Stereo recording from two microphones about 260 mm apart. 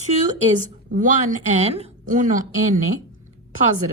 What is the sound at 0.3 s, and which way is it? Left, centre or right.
A woman's voice, right.